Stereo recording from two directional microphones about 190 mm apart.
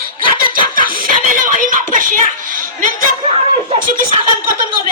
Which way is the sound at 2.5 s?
45° right (ahead or behind).